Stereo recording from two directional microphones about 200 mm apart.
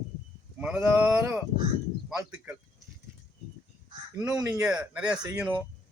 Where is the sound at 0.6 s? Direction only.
5° right (ahead or behind).